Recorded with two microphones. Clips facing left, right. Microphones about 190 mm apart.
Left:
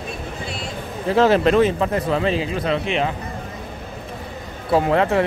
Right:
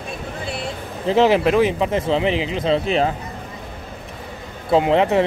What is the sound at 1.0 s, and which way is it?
A man's voice, 15° right (ahead or behind).